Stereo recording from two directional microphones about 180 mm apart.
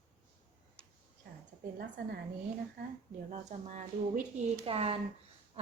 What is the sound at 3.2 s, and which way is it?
A woman's voice, 40° right (ahead or behind).